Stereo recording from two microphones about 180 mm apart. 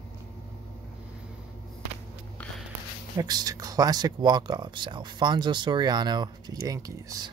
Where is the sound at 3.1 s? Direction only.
20° right (ahead or behind).